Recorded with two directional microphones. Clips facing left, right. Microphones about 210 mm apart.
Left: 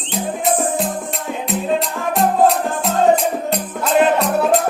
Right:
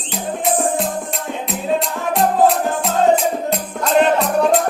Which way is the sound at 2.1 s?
Centre (ahead or behind).